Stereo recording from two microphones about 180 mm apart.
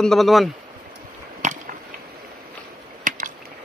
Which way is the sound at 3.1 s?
50° right (ahead or behind).